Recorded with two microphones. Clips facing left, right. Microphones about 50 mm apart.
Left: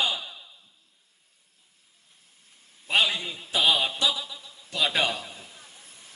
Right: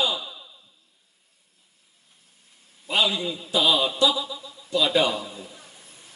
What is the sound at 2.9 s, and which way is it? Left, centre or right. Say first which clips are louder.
A man's voice: right 1 dB; left.